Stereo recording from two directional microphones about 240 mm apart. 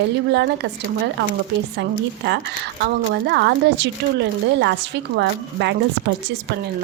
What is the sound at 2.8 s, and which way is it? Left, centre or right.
Speech, right.